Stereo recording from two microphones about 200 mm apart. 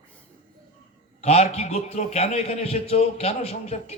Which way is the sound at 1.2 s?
30° left (ahead or behind).